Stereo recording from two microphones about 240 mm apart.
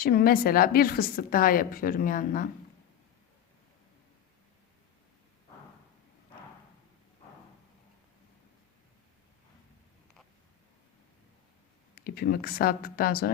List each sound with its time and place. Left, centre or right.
0.0 s a woman's voice: left
11.9 s a woman's voice: left